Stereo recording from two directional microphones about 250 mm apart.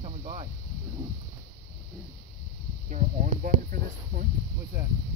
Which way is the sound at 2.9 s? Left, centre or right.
Right.